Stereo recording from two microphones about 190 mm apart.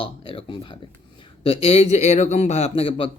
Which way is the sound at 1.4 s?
30° left (ahead or behind).